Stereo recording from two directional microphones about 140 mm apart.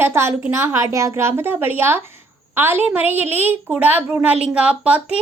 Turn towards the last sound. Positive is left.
turn(degrees=-10)  # may be behind; listen again after turning